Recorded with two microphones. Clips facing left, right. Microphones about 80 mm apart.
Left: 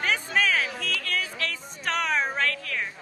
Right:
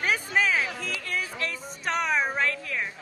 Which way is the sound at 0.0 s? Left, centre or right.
Centre.